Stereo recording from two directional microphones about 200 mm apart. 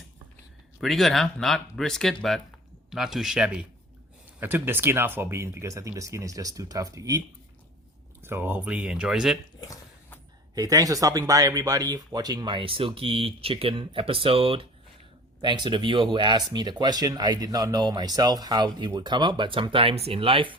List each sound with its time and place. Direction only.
0.8 s speech: centre (ahead or behind); by 7.2 s 15° right (ahead or behind)
8.2 s speech: 10° right (ahead or behind)
9.6 s a sound: 15° left (ahead or behind)
10.5 s speech: 15° right (ahead or behind)